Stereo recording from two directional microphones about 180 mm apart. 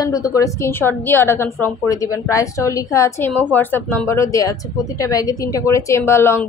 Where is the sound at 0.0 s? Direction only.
20° left (ahead or behind).